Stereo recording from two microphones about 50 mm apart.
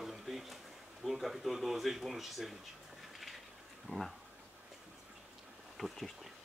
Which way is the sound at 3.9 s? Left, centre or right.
Left.